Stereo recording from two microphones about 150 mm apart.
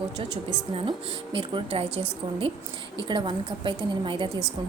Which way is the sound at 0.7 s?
35° right (ahead or behind).